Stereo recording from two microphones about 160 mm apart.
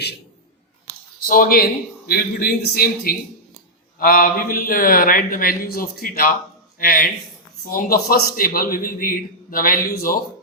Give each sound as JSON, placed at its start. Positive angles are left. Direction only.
{"t": 1.3, "sound": "a man's voice", "side_deg": 65}